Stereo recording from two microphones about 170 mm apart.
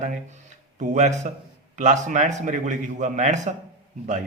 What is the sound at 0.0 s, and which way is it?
Speech, 45° right (ahead or behind).